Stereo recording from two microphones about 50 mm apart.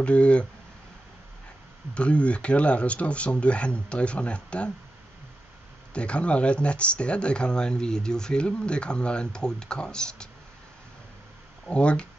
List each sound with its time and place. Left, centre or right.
0.0 s speech: left
2.0 s speech: left
5.9 s speech: left
11.6 s speech: left